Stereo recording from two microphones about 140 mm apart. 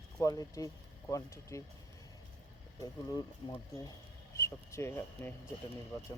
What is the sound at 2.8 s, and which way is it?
Speech, 25° left (ahead or behind).